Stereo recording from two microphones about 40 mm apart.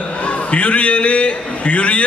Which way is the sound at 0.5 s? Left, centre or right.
Left.